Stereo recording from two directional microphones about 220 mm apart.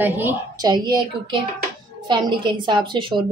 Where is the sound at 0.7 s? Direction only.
20° right (ahead or behind).